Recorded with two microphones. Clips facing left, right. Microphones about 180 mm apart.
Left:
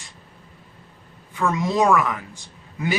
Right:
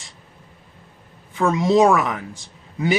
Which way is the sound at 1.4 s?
25° right (ahead or behind).